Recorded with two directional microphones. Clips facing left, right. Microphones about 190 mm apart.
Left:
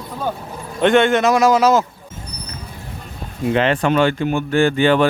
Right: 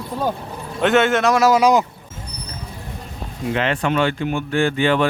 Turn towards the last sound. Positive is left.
turn(degrees=40)  # may be behind; listen again after turning